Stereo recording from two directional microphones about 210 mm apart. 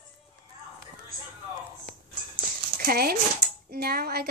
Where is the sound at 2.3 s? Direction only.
45° right (ahead or behind).